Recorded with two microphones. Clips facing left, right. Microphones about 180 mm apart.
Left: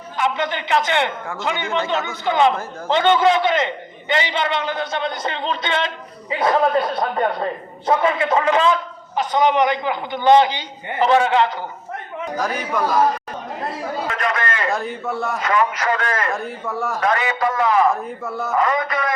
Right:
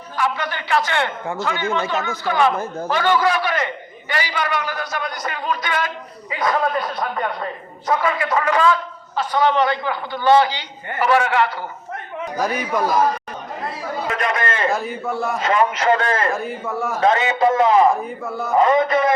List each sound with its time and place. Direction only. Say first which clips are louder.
0.2 s a man's voice: left 2 dB; 20° left (ahead or behind)
12.4 s speech: right 2 dB; 10° right (ahead or behind)
14.1 s chatter: right 3 dB; 20° right (ahead or behind)
14.7 s a man's voice: right 1 dB; centre (ahead or behind)
15.4 s a man's voice: right 2 dB; 25° right (ahead or behind)
16.3 s a man's voice: right 1 dB; centre (ahead or behind)
17.0 s a man's voice: right 5 dB; 25° right (ahead or behind)
17.9 s a man's voice: right 1 dB; centre (ahead or behind)
18.5 s a man's voice: right 5 dB; 25° right (ahead or behind)